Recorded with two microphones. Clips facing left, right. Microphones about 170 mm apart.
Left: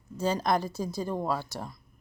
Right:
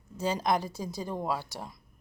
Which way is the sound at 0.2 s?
15° right (ahead or behind).